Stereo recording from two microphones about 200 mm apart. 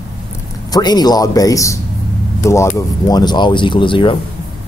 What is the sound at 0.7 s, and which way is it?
Speech, 20° left (ahead or behind).